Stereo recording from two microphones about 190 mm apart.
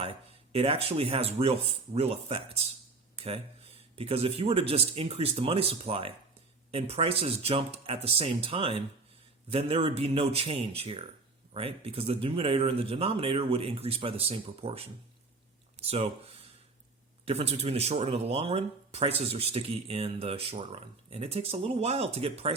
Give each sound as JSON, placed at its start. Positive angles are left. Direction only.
{"t": 0.0, "sound": "speech", "side_deg": -30}